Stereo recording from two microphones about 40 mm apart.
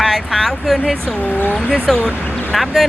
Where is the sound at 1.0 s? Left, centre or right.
Left.